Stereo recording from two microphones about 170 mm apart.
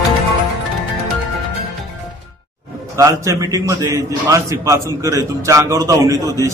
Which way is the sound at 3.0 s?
20° right (ahead or behind).